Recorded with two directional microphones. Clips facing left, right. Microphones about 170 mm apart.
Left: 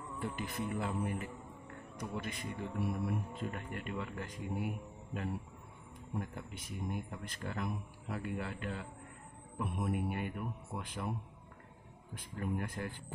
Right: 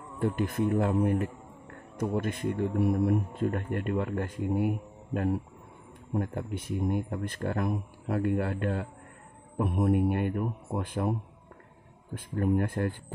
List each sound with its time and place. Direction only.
0.2 s speech: 50° right (ahead or behind)